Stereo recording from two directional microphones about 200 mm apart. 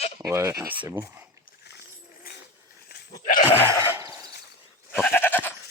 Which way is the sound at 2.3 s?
50° left (ahead or behind).